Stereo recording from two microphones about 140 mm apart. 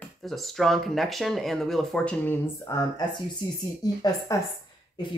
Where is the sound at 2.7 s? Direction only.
25° left (ahead or behind).